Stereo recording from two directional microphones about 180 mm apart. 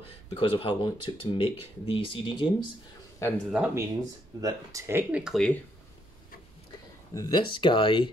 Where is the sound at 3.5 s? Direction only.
5° right (ahead or behind).